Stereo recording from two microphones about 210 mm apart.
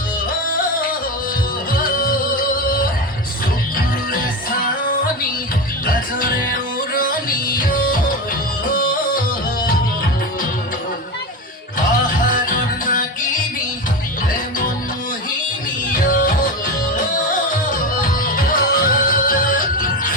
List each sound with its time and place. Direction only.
0.5 s music: 40° left (ahead or behind)
5.8 s music: 40° left (ahead or behind)
12.5 s music: 40° left (ahead or behind)
15.9 s music: 40° left (ahead or behind)